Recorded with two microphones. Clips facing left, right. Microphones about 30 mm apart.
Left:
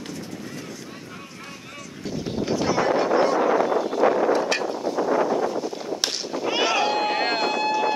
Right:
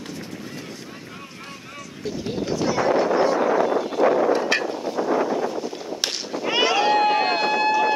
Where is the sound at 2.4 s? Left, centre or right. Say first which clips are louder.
Even; centre.